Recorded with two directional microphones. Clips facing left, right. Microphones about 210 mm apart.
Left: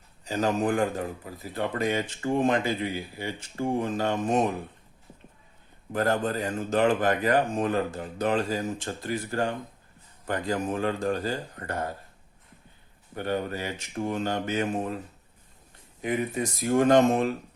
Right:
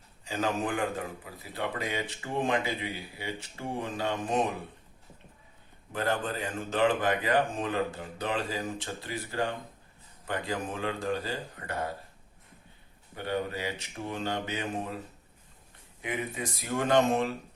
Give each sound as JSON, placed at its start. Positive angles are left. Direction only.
{"t": 0.3, "sound": "speech", "side_deg": 40}
{"t": 5.9, "sound": "speech", "side_deg": 40}
{"t": 13.1, "sound": "speech", "side_deg": 45}
{"t": 16.0, "sound": "speech", "side_deg": 40}